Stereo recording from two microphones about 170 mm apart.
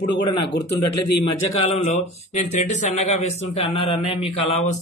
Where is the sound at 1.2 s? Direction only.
35° left (ahead or behind).